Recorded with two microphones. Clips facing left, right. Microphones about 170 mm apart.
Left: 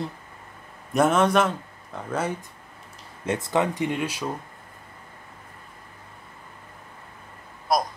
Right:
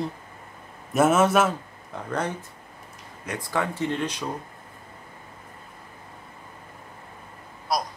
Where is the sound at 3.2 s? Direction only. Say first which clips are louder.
Left 4 dB; 20° left (ahead or behind).